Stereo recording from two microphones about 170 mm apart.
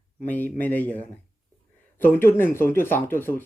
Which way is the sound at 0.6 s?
10° left (ahead or behind).